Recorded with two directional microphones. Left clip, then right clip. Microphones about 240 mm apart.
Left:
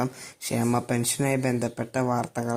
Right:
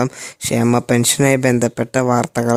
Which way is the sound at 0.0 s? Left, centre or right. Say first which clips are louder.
Right 9 dB; right.